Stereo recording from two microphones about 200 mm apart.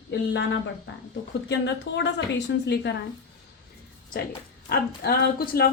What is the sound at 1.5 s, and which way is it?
Speech, 60° left (ahead or behind).